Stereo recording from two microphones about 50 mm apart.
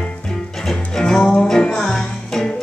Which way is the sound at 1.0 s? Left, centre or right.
Centre.